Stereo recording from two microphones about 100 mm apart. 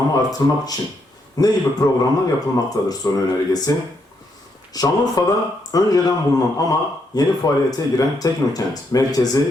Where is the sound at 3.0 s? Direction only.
35° left (ahead or behind).